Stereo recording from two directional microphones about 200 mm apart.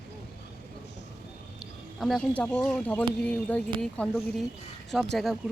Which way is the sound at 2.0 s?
Centre (ahead or behind).